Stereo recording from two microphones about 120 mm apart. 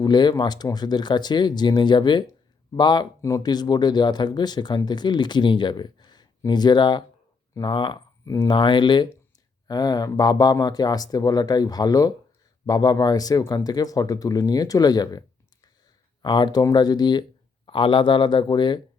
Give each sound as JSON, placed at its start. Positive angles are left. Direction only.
{"t": 0.0, "sound": "speech", "side_deg": 35}
{"t": 3.2, "sound": "speech", "side_deg": 25}
{"t": 8.2, "sound": "speech", "side_deg": 30}
{"t": 16.2, "sound": "speech", "side_deg": 40}